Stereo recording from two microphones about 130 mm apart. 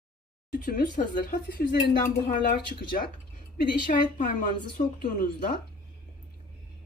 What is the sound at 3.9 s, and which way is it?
Speech, 90° left.